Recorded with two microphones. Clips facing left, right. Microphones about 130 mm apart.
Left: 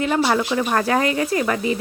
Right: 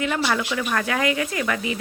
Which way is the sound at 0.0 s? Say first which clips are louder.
Left 4 dB; 35° left (ahead or behind).